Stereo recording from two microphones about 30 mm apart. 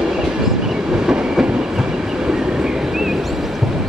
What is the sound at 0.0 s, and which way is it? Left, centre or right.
Train, centre.